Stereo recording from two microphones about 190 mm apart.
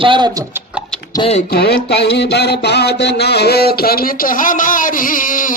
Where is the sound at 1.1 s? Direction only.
25° left (ahead or behind).